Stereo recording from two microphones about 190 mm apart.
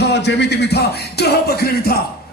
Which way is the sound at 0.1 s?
65° left (ahead or behind).